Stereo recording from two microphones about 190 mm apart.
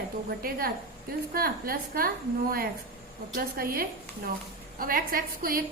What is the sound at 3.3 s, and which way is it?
A woman's voice, 50° right (ahead or behind).